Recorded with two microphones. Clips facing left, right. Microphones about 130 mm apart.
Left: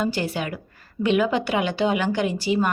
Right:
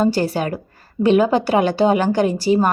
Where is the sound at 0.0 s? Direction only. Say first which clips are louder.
Right 7 dB; 40° right (ahead or behind).